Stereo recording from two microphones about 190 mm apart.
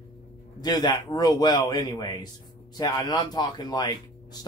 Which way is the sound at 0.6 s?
20° left (ahead or behind).